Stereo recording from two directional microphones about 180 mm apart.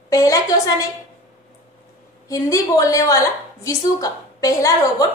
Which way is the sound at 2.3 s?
20° left (ahead or behind).